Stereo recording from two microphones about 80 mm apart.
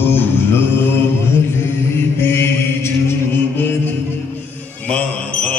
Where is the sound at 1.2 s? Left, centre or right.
Left.